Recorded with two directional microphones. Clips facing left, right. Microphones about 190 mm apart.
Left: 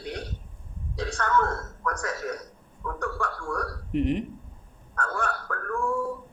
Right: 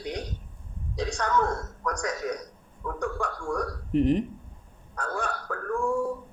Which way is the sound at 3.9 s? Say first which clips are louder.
Right 3 dB; 35° right (ahead or behind).